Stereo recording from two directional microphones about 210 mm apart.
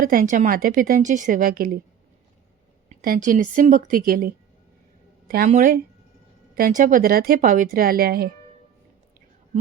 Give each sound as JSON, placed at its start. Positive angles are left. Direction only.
{"t": 0.0, "sound": "a woman's voice", "side_deg": -40}
{"t": 2.9, "sound": "a woman's voice", "side_deg": -40}
{"t": 5.5, "sound": "a woman's voice", "side_deg": -40}